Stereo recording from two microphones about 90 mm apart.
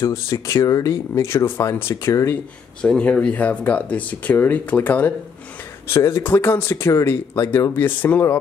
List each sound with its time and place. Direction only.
0.0 s speech: 35° left (ahead or behind)
2.8 s speech: 10° left (ahead or behind)
5.9 s speech: 30° left (ahead or behind)